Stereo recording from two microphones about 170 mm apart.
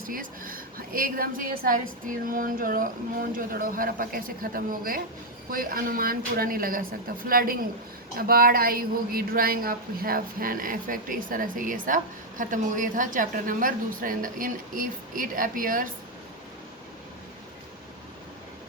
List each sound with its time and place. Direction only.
0.0 s a woman's voice: 55° right (ahead or behind)